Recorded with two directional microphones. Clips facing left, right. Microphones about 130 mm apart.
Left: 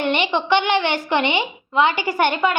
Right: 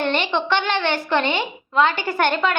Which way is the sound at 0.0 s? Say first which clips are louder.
Left 1 dB; 15° left (ahead or behind).